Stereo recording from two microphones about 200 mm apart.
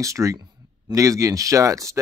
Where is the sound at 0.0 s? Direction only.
15° right (ahead or behind).